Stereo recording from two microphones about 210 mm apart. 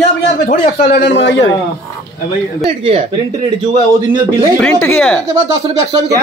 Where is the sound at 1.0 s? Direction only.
60° left (ahead or behind).